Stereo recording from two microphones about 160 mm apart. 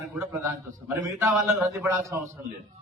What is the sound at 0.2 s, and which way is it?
A man's voice, 20° right (ahead or behind).